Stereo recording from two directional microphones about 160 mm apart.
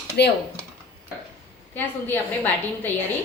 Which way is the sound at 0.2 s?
90° left.